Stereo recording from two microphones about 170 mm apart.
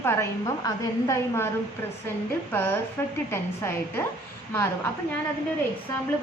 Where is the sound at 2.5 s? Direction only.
15° left (ahead or behind).